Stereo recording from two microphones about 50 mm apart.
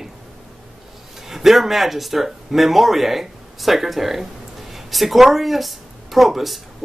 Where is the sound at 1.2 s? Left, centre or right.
Centre.